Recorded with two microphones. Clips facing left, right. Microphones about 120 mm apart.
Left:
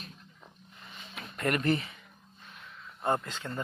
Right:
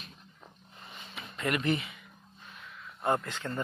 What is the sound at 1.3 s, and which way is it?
Speech, 45° left (ahead or behind).